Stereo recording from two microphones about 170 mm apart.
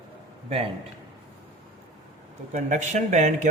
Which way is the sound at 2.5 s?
45° right (ahead or behind).